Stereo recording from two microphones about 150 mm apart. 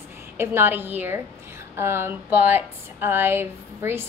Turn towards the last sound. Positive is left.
turn(degrees=-15)  # may be behind; listen again after turning